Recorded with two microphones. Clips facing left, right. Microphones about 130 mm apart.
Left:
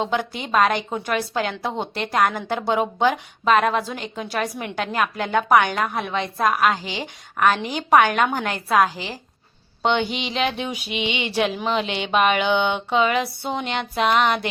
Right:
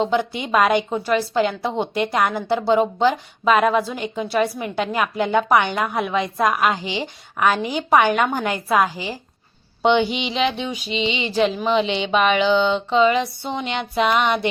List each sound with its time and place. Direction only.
0.5 s a woman's voice: 5° right (ahead or behind)
6.5 s speech: centre (ahead or behind)
6.8 s a woman's voice: 50° left (ahead or behind)
7.3 s a woman's voice: 10° right (ahead or behind)
9.8 s a sound: 5° right (ahead or behind)
10.2 s speech: centre (ahead or behind)
10.9 s a sound: 10° left (ahead or behind)
11.3 s speech: centre (ahead or behind)